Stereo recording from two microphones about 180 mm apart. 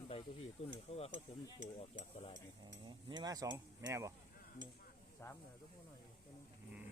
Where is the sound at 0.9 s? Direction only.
35° left (ahead or behind).